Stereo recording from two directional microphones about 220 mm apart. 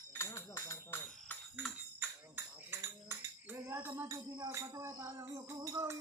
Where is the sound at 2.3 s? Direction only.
10° right (ahead or behind).